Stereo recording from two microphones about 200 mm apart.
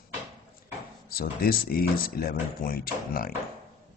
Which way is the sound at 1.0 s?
50° left (ahead or behind).